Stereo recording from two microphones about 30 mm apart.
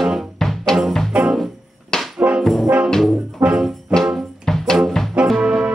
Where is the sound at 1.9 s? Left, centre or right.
Left.